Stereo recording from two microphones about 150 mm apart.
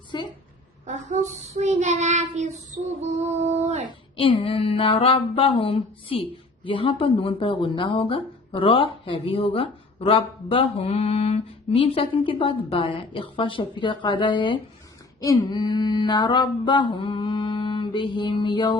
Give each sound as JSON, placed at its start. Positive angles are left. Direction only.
{"t": 0.1, "sound": "a sound", "side_deg": 30}
{"t": 0.9, "sound": "child singing", "side_deg": -55}
{"t": 4.2, "sound": "speech", "side_deg": 35}